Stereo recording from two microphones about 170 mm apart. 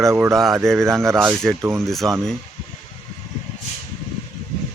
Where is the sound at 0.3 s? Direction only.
Centre (ahead or behind).